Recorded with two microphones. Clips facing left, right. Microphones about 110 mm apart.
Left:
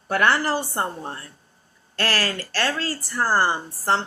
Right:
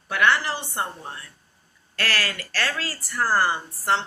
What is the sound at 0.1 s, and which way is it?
Speech, 40° left (ahead or behind).